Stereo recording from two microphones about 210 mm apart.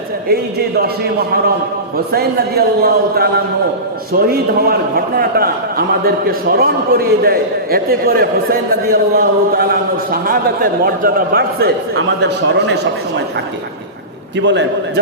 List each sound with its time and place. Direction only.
0.8 s a man's voice: 45° right (ahead or behind)
14.3 s a man's voice: 55° right (ahead or behind)